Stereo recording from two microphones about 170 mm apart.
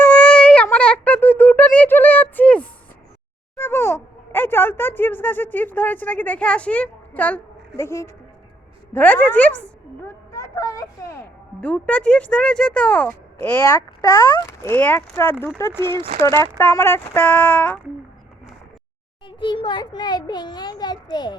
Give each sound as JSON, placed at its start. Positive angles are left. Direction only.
{"t": 0.0, "sound": "a sound", "side_deg": 5}
{"t": 3.6, "sound": "a woman's voice", "side_deg": 15}
{"t": 11.6, "sound": "speech", "side_deg": 10}
{"t": 16.0, "sound": "speech", "side_deg": -35}
{"t": 16.2, "sound": "speech", "side_deg": 20}
{"t": 19.4, "sound": "a child's voice", "side_deg": 30}